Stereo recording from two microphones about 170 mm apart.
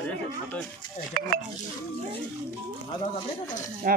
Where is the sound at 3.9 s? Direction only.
55° right (ahead or behind).